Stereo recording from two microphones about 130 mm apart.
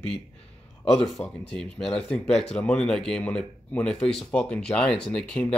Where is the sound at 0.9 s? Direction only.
5° left (ahead or behind).